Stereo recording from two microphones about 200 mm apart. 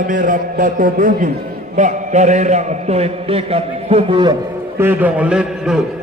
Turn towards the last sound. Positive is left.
turn(degrees=-5)  # may be behind; listen again after turning